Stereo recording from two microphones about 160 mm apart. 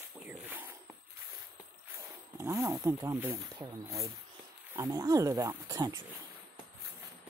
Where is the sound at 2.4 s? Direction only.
20° right (ahead or behind).